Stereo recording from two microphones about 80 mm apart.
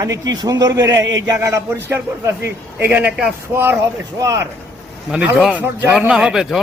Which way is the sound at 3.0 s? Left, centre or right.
Centre.